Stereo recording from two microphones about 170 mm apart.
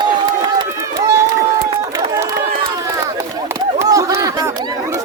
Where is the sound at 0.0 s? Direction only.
25° right (ahead or behind).